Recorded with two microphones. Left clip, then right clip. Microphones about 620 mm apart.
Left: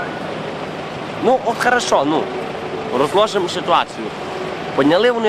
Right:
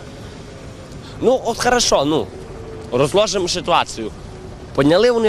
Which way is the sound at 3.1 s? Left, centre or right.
Right.